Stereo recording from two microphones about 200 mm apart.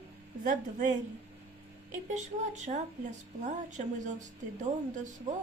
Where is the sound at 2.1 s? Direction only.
35° right (ahead or behind).